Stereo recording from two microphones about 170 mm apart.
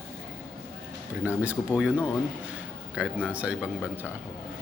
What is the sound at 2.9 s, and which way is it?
Speech, 5° right (ahead or behind).